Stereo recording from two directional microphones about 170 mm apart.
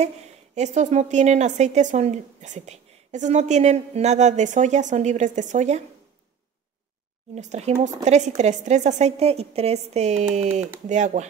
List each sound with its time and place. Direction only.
0.7 s a woman's voice: 45° right (ahead or behind)
7.3 s a woman's voice: 40° right (ahead or behind)